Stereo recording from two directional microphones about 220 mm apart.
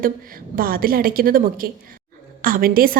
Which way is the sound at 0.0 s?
40° right (ahead or behind).